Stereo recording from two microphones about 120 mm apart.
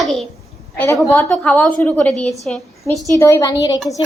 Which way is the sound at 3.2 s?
25° left (ahead or behind).